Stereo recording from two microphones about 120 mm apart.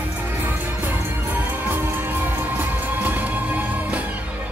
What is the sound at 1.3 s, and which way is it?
Music, 15° right (ahead or behind).